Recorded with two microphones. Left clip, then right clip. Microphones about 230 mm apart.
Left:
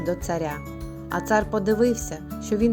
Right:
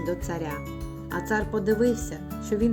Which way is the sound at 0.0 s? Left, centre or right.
Left.